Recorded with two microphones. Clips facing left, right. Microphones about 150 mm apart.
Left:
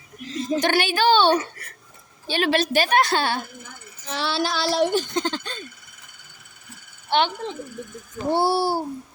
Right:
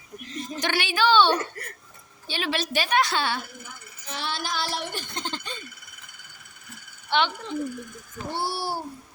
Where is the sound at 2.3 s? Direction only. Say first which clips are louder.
Left 7 dB; 50° left (ahead or behind).